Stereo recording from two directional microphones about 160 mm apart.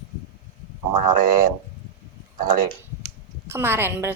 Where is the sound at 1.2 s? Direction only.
60° right (ahead or behind).